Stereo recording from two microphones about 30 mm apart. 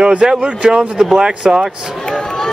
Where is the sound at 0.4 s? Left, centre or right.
Right.